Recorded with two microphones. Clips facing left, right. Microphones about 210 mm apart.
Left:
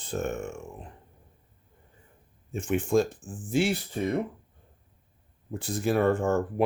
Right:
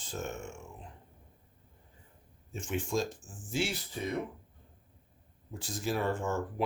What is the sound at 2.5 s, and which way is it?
Speech, 55° left (ahead or behind).